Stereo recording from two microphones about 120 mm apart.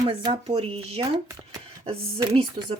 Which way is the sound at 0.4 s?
55° right (ahead or behind).